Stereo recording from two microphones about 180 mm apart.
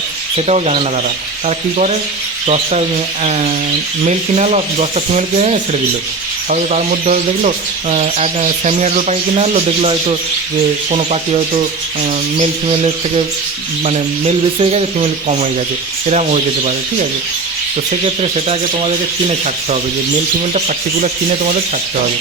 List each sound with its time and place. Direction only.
0.3 s speech: 35° right (ahead or behind)
4.0 s speech: 40° right (ahead or behind)
18.0 s speech: 35° right (ahead or behind)
20.5 s speech: 40° right (ahead or behind)